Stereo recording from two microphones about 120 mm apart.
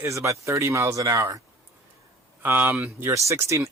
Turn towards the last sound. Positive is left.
turn(degrees=-25)  # may be behind; listen again after turning